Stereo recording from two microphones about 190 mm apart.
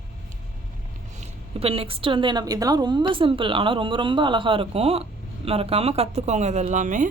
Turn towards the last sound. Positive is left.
turn(degrees=-40)  # may be behind; listen again after turning